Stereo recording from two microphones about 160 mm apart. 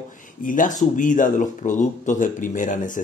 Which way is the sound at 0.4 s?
55° left (ahead or behind).